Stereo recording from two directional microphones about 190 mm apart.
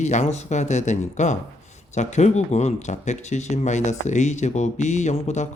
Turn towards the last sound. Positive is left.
turn(degrees=40)  # may be behind; listen again after turning